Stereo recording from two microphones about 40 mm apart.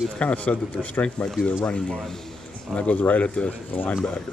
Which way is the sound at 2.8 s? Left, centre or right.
Left.